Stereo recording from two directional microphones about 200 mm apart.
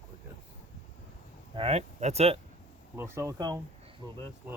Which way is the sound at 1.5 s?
30° right (ahead or behind).